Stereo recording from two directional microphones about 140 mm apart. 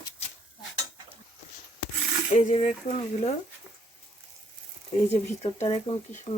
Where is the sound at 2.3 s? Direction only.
60° left (ahead or behind).